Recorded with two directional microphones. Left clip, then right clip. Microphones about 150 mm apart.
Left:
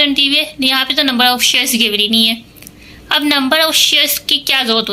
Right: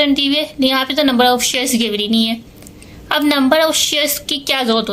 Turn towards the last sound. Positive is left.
turn(degrees=-35)  # may be behind; listen again after turning